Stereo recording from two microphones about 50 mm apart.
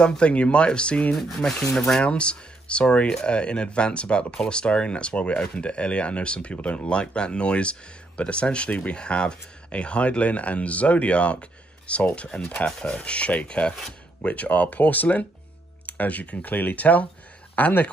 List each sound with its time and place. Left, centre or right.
0.2 s speech: left
1.1 s speech: centre
2.0 s speech: left